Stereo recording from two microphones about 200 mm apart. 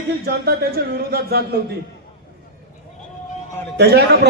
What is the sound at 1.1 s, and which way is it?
Speech, 50° right (ahead or behind).